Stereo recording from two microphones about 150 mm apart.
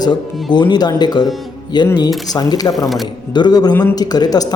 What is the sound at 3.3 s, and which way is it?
A man's voice, 30° left (ahead or behind).